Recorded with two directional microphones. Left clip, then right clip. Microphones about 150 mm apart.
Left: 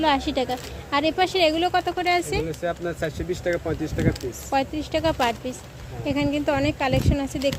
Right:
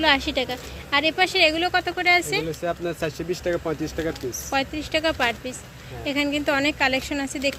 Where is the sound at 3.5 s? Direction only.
30° right (ahead or behind).